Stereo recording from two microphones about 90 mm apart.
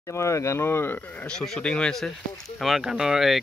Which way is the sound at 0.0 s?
35° left (ahead or behind).